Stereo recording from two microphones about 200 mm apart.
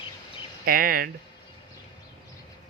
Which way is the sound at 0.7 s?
45° right (ahead or behind).